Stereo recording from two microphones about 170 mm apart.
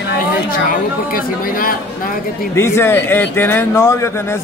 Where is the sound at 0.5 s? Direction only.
55° left (ahead or behind).